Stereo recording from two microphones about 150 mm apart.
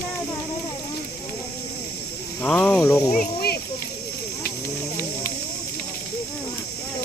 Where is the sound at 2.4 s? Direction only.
10° left (ahead or behind).